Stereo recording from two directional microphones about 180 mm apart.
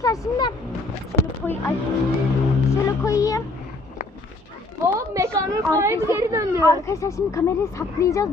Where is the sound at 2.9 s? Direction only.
20° left (ahead or behind).